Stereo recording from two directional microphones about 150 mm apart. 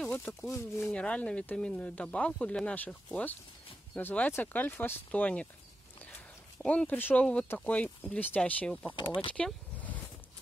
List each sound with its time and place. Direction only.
0.0 s a sound: 10° left (ahead or behind)
0.5 s speech: 20° left (ahead or behind)
0.9 s speech: 10° left (ahead or behind)
6.6 s speech: 10° left (ahead or behind)
8.9 s speech: 35° left (ahead or behind)
9.3 s vehicle: 10° left (ahead or behind)